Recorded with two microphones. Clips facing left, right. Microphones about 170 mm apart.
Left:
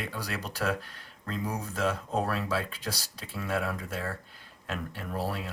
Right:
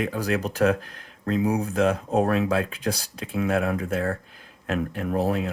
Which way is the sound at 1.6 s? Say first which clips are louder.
Right 8 dB; 55° right (ahead or behind).